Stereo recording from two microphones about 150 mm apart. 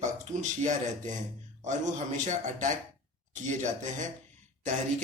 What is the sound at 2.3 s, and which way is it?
Speech, 55° right (ahead or behind).